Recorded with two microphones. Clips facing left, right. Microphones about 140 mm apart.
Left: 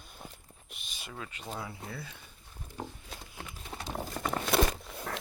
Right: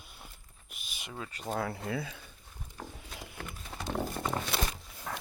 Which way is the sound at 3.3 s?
60° right (ahead or behind).